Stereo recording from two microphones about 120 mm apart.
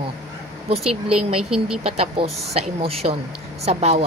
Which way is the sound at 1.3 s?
5° right (ahead or behind).